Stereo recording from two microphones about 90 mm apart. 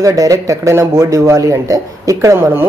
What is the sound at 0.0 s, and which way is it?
Speech, 40° right (ahead or behind).